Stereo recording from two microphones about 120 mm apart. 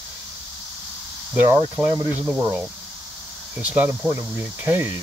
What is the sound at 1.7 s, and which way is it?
Speech, 25° right (ahead or behind).